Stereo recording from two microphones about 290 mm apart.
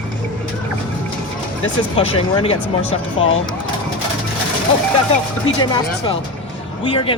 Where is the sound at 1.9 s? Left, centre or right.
Centre.